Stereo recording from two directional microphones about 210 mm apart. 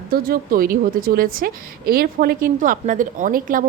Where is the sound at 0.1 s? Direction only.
45° right (ahead or behind).